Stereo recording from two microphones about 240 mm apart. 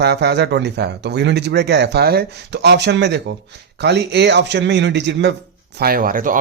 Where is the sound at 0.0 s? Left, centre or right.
Right.